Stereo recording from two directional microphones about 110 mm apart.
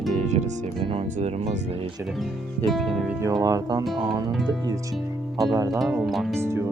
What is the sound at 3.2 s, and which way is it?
Speech, 30° right (ahead or behind).